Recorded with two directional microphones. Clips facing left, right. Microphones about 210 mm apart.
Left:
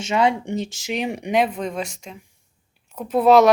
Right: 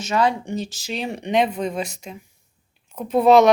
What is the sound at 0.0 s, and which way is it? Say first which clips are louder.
Speech: left 1 dB; 25° left (ahead or behind).